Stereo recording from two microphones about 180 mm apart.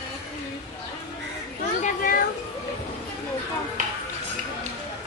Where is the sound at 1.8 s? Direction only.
50° left (ahead or behind).